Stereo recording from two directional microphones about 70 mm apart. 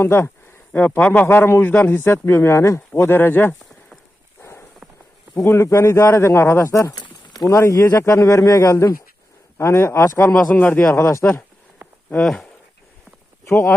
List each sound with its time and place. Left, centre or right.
0.0 s speech: left
0.7 s a man's voice: left
2.2 s speech: left
4.4 s a sound: left
5.3 s speech: left
6.9 s a sound: left
7.4 s speech: left
10.5 s a man's voice: left
10.9 s speech: left
11.8 s a sound: right
12.2 s speech: centre
13.4 s speech: left